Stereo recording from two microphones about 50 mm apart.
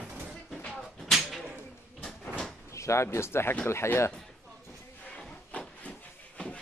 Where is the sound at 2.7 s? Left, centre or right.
Left.